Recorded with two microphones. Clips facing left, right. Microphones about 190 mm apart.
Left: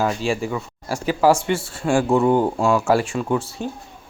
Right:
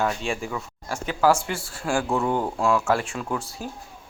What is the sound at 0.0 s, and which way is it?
Speech, centre (ahead or behind).